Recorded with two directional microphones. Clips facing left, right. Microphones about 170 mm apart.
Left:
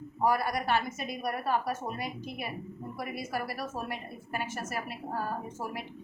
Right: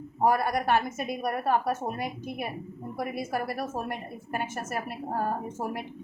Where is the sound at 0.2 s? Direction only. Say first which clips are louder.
Right 3 dB; 55° right (ahead or behind).